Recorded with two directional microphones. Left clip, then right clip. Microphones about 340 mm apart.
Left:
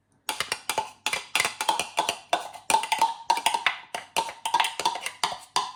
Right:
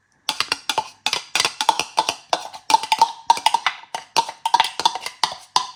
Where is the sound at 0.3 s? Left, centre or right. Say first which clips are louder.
Right 6 dB; centre.